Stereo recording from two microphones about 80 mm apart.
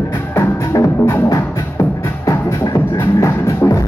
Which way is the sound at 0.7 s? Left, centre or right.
Left.